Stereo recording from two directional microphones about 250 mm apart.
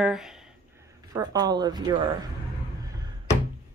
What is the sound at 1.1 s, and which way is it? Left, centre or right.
Speech, centre.